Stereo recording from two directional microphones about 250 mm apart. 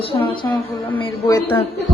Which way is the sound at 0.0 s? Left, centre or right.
Left.